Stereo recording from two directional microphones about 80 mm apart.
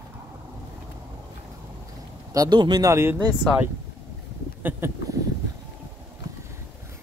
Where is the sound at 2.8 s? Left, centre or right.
Right.